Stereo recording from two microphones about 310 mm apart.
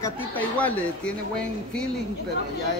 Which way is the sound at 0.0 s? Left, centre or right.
Centre.